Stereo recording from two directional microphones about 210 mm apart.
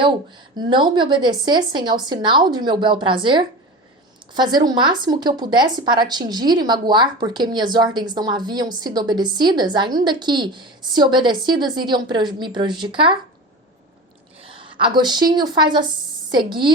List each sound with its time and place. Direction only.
0.5 s a woman's voice: 20° right (ahead or behind)
14.4 s a woman's voice: 25° right (ahead or behind)